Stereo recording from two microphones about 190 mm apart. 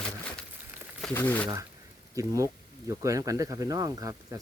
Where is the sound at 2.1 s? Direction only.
15° right (ahead or behind).